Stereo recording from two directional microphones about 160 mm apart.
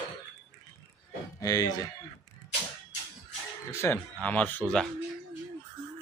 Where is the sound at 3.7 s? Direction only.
15° left (ahead or behind).